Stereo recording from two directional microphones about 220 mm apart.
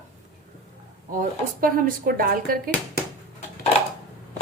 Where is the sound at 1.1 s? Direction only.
40° right (ahead or behind).